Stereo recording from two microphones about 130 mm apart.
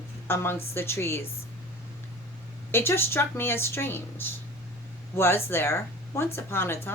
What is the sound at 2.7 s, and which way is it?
A woman's voice, 15° left (ahead or behind).